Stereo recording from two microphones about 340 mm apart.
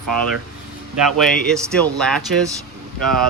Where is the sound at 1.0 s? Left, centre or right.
Centre.